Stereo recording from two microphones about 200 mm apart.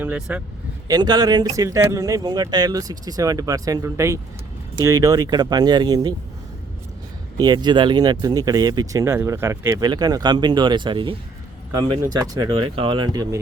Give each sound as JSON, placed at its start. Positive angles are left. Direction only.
{"t": 0.0, "sound": "speech", "side_deg": -5}
{"t": 0.9, "sound": "speech", "side_deg": -20}
{"t": 7.3, "sound": "speech", "side_deg": -20}